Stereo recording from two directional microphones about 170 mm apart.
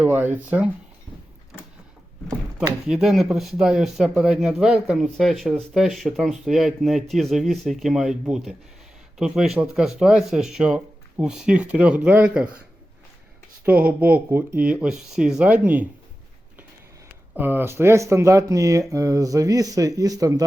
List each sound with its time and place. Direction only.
0.0 s speech: 10° right (ahead or behind)
2.8 s speech: 5° right (ahead or behind)
13.7 s speech: 10° right (ahead or behind)
17.3 s speech: 10° right (ahead or behind)